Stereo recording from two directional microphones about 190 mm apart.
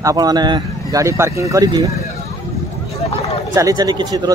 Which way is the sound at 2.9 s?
35° left (ahead or behind).